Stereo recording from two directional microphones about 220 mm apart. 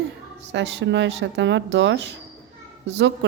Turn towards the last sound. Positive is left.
turn(degrees=-55)  # may be behind; listen again after turning